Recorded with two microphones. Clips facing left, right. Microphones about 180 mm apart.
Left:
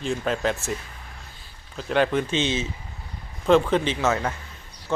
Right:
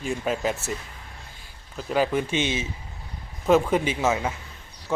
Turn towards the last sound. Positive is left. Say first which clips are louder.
# even
turn(degrees=-10)  # may be behind; listen again after turning